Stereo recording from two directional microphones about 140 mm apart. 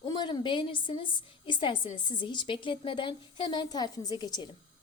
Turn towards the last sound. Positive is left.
turn(degrees=30)  # may be behind; listen again after turning